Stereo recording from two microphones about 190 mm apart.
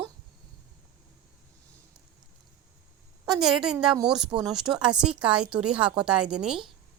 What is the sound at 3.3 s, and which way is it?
Speech, centre (ahead or behind).